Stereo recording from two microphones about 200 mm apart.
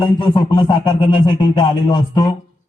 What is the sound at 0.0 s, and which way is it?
Music, 25° left (ahead or behind).